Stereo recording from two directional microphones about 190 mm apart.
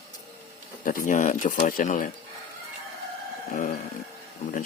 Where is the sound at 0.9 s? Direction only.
45° left (ahead or behind).